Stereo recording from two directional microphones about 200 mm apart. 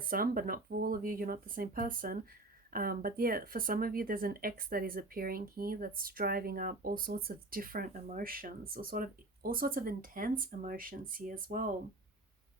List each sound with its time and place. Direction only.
0.0 s speech: 45° right (ahead or behind)